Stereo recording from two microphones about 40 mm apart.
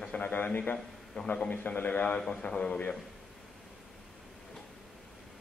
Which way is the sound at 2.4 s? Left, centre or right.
Left.